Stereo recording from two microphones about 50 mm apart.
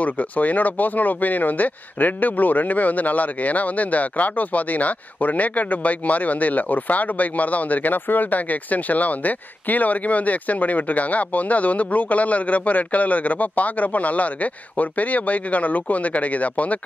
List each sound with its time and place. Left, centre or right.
0.0 s speech: left